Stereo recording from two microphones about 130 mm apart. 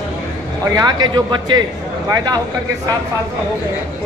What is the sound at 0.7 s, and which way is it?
Speech, 30° right (ahead or behind).